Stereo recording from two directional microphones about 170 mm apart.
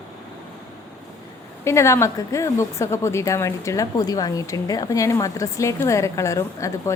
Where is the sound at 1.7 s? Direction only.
15° left (ahead or behind).